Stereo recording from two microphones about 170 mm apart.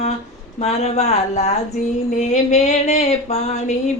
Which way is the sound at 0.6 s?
40° left (ahead or behind).